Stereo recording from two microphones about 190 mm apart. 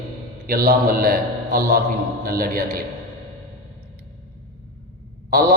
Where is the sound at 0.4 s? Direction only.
50° right (ahead or behind).